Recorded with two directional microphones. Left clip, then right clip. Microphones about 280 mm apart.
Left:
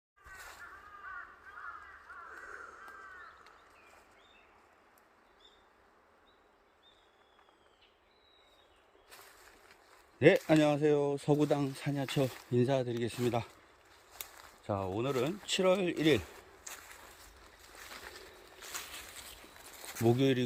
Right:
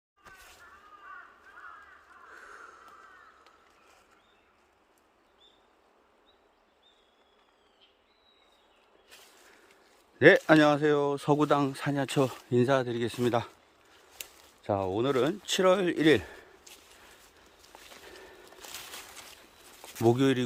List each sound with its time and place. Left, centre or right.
2.3 s a sound: centre
10.2 s speech: centre
14.6 s speech: centre
20.1 s speech: centre